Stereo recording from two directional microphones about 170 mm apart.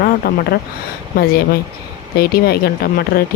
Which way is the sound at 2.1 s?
60° left (ahead or behind).